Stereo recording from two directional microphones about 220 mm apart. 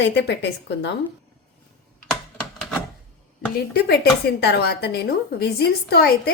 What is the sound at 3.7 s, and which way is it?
A woman's voice, 50° left (ahead or behind).